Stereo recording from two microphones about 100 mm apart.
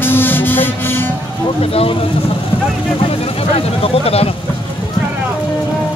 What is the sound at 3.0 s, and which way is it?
Speech, 70° left (ahead or behind).